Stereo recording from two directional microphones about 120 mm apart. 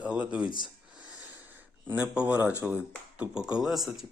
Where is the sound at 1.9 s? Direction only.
10° right (ahead or behind).